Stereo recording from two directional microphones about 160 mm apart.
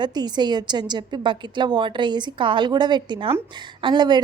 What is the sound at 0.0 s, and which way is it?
A woman's voice, 25° right (ahead or behind).